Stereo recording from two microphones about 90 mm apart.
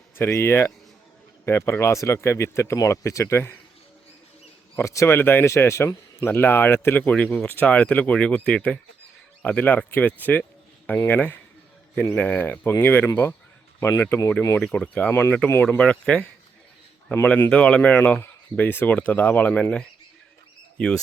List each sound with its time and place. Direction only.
0.2 s speech: 30° left (ahead or behind)
4.8 s speech: 35° left (ahead or behind)
13.7 s speech: 30° left (ahead or behind)
14.6 s speech: 15° left (ahead or behind)
15.1 s speech: 25° left (ahead or behind)
15.8 s speech: 10° left (ahead or behind)
17.2 s speech: 20° left (ahead or behind)
20.7 s speech: 10° left (ahead or behind)